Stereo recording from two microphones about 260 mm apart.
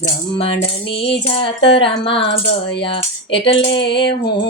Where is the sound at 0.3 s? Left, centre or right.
Left.